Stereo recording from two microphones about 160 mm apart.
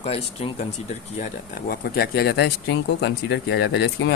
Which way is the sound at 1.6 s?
70° left (ahead or behind).